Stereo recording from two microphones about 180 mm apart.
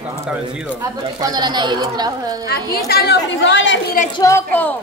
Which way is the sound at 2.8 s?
60° left (ahead or behind).